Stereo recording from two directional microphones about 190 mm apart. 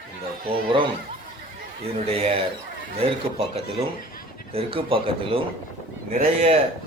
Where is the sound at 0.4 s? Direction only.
25° right (ahead or behind).